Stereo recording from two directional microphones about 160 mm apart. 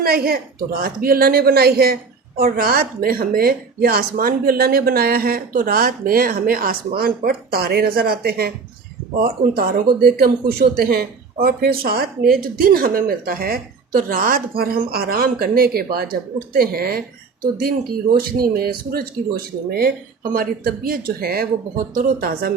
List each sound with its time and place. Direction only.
0.0 s a woman's voice: 70° right (ahead or behind)
18.2 s a woman's voice: 70° right (ahead or behind)
20.3 s a woman's voice: 70° right (ahead or behind)